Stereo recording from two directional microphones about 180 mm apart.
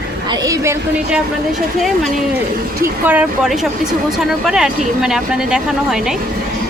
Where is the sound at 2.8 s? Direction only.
10° right (ahead or behind).